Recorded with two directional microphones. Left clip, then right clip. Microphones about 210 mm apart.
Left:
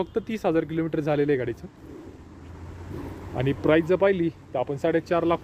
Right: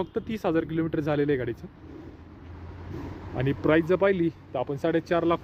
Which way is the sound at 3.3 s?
Centre (ahead or behind).